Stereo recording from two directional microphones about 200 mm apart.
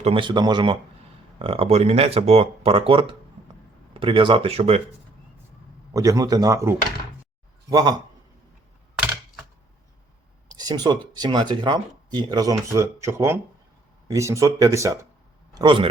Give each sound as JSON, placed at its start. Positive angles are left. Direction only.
{"t": 0.0, "sound": "speech", "side_deg": -25}
{"t": 5.9, "sound": "speech", "side_deg": -15}
{"t": 10.5, "sound": "a sound", "side_deg": -20}
{"t": 11.1, "sound": "speech", "side_deg": -20}